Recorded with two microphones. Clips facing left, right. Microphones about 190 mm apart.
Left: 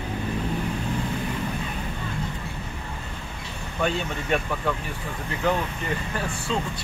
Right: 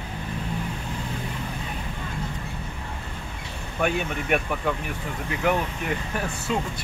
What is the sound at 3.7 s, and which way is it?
Speech, 15° right (ahead or behind).